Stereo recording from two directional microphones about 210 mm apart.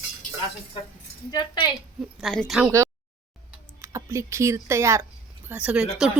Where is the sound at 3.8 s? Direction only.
15° right (ahead or behind).